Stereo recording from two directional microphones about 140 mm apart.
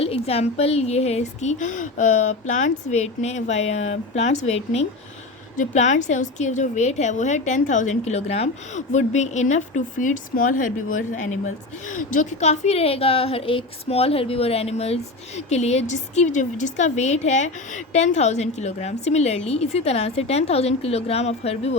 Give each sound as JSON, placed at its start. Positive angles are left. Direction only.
{"t": 0.0, "sound": "a woman's voice", "side_deg": 45}
{"t": 5.5, "sound": "a woman's voice", "side_deg": 60}